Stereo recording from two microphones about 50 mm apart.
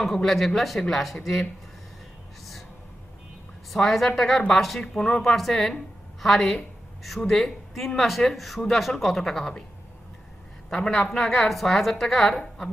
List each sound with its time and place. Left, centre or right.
0.0 s speech: centre
3.7 s a woman's voice: centre
10.8 s a woman's voice: centre